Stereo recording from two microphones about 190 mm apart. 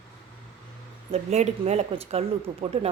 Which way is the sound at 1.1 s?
35° right (ahead or behind).